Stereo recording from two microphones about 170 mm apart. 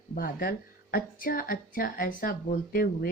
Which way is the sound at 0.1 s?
60° left (ahead or behind).